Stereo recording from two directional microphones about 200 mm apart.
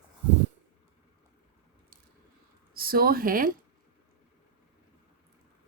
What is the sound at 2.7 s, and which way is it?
Speech, 50° right (ahead or behind).